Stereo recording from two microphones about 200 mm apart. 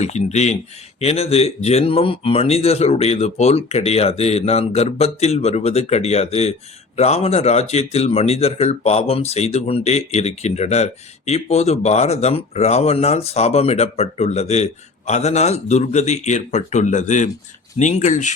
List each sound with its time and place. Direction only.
0.0 s speech: 35° left (ahead or behind)